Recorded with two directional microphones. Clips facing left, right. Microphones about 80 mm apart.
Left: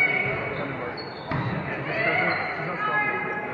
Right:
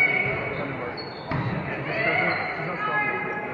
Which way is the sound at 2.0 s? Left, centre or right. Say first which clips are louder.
Even; centre.